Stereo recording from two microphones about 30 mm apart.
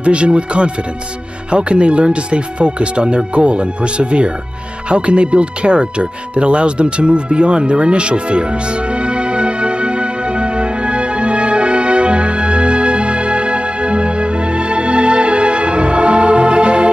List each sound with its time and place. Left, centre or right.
0.0 s speech: right
4.8 s music: right